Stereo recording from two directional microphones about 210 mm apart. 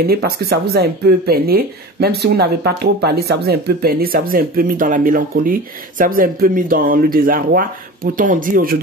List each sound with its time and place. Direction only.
0.0 s speech: 45° right (ahead or behind)